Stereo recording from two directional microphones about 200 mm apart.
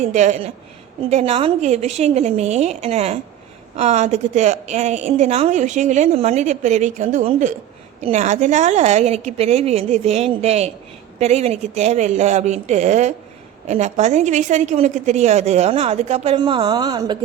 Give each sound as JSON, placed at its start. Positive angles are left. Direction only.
{"t": 0.0, "sound": "a woman's voice", "side_deg": -35}